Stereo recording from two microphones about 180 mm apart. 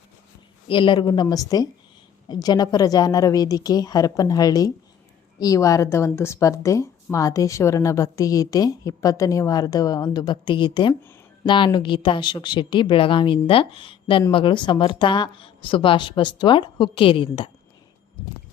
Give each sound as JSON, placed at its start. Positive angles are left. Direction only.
{"t": 0.7, "sound": "a woman's voice", "side_deg": 25}